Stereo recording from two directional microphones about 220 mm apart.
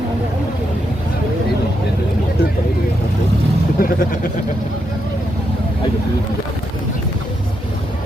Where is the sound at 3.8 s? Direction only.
40° left (ahead or behind).